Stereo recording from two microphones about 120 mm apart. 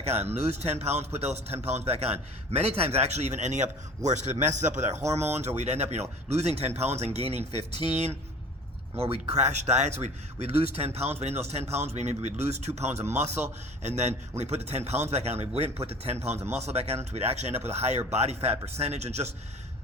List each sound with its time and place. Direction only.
0.0 s a man's voice: 60° right (ahead or behind)
9.3 s a man's voice: 70° right (ahead or behind)